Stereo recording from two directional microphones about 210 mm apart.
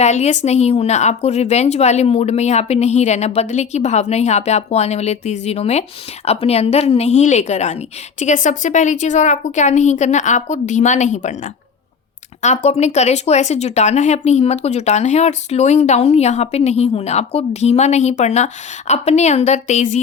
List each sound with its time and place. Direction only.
0.0 s speech: 35° left (ahead or behind)
12.4 s speech: 35° left (ahead or behind)